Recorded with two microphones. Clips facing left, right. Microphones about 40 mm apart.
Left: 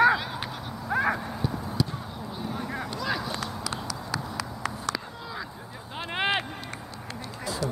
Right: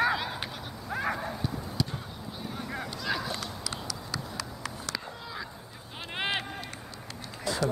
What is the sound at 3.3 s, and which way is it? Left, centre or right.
Run, left.